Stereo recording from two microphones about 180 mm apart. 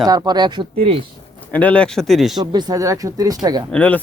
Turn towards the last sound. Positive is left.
turn(degrees=5)  # may be behind; listen again after turning